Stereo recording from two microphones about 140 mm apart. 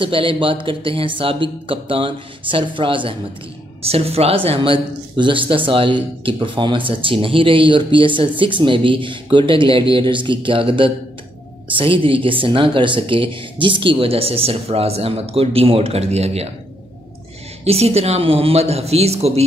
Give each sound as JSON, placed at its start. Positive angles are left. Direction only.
{"t": 0.0, "sound": "speech", "side_deg": -40}
{"t": 17.6, "sound": "speech", "side_deg": -45}